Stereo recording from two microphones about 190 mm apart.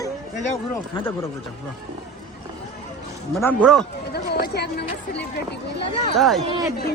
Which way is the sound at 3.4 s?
10° left (ahead or behind).